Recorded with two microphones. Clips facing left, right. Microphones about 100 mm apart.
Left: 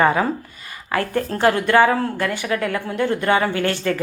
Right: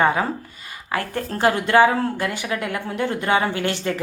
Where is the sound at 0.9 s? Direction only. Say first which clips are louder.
Left 4 dB; 35° left (ahead or behind).